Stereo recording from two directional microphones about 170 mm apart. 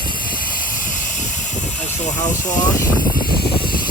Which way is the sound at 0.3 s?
55° left (ahead or behind).